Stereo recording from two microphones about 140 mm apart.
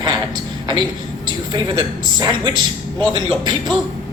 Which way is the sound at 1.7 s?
30° right (ahead or behind).